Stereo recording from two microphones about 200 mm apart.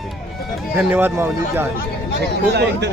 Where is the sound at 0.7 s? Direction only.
10° right (ahead or behind).